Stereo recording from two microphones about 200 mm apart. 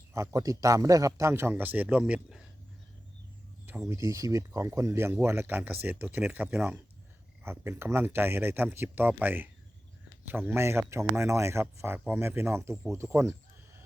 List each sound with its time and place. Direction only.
0.1 s speech: 15° right (ahead or behind)
3.7 s speech: 10° right (ahead or behind)